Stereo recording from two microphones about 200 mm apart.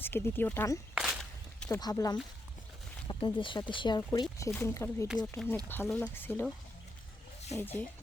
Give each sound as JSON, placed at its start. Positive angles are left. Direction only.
{"t": 0.0, "sound": "speech", "side_deg": 10}
{"t": 0.9, "sound": "walk", "side_deg": 0}
{"t": 1.8, "sound": "speech", "side_deg": 20}
{"t": 7.6, "sound": "speech", "side_deg": 10}